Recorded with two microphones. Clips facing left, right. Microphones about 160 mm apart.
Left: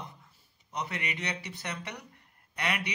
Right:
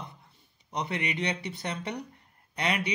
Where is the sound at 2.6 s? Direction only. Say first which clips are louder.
Right 4 dB; 30° right (ahead or behind).